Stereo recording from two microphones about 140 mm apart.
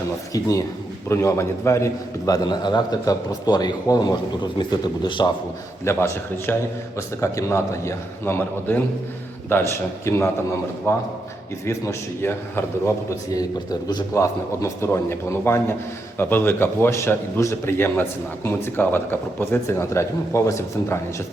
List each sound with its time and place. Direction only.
0.3 s a man's voice: 25° left (ahead or behind)
5.8 s a man's voice: 20° left (ahead or behind)